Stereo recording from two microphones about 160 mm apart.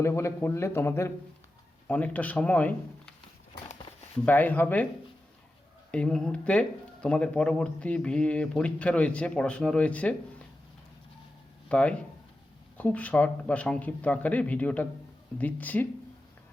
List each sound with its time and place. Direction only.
0.0 s speech: 15° left (ahead or behind)
4.3 s speech: 10° left (ahead or behind)
5.9 s speech: 5° left (ahead or behind)
11.7 s speech: 5° left (ahead or behind)